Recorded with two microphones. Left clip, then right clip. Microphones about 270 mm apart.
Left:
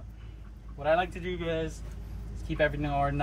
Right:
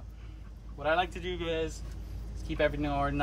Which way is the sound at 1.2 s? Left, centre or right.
Right.